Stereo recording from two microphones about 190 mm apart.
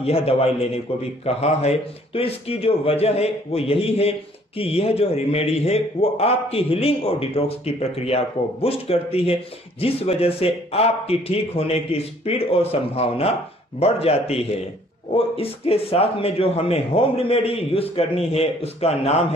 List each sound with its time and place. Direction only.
0.0 s a man's voice: 30° left (ahead or behind)